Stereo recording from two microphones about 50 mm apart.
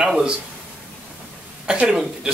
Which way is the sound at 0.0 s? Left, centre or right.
Centre.